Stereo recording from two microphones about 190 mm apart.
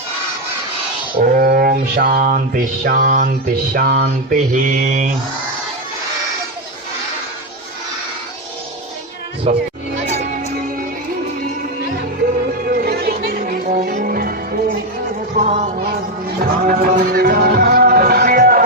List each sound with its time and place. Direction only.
1.2 s mantra: 50° right (ahead or behind)
9.4 s music: 35° right (ahead or behind)
12.6 s music: 55° right (ahead or behind)
15.4 s a sound: 35° right (ahead or behind)
16.4 s music: 45° right (ahead or behind)